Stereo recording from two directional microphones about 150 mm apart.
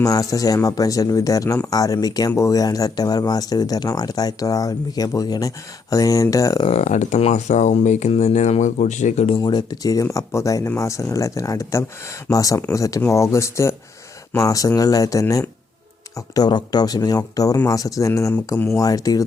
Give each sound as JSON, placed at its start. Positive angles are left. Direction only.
{"t": 0.0, "sound": "speech", "side_deg": 25}
{"t": 6.7, "sound": "speech", "side_deg": 50}
{"t": 9.4, "sound": "speech", "side_deg": 25}
{"t": 18.8, "sound": "speech", "side_deg": 25}